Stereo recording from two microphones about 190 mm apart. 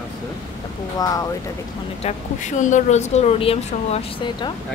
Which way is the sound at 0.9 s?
20° left (ahead or behind).